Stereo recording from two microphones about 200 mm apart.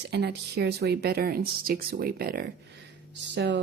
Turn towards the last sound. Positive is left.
turn(degrees=-60)  # may be behind; listen again after turning